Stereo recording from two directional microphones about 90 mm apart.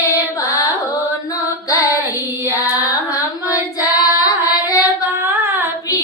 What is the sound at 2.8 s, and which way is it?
Carnatic music, 40° left (ahead or behind).